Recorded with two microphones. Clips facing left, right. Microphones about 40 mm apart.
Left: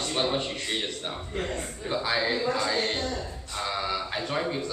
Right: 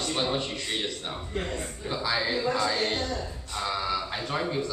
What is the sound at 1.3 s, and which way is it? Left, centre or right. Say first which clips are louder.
A woman's voice: even; centre.